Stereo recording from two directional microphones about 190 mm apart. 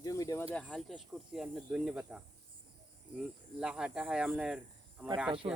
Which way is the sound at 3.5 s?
5° right (ahead or behind).